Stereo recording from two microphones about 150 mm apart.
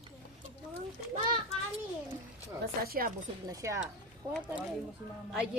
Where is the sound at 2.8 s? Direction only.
90° right.